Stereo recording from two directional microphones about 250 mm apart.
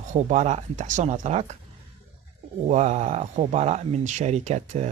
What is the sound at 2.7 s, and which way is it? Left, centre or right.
Speech, right.